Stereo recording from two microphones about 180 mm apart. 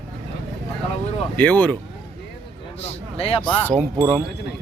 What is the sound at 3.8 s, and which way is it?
Speech, 15° right (ahead or behind).